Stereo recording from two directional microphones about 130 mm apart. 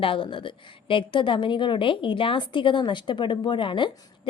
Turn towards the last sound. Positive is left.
turn(degrees=40)  # may be behind; listen again after turning